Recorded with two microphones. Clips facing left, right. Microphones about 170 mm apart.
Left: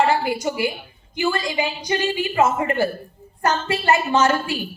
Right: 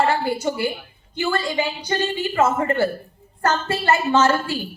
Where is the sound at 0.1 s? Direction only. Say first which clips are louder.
Even; 15° left (ahead or behind).